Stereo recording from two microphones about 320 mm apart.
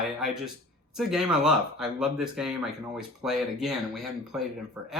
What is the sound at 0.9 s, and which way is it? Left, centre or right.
Speech, centre.